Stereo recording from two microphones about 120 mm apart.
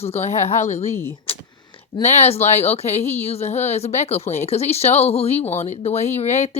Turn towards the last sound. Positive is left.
turn(degrees=65)  # may be behind; listen again after turning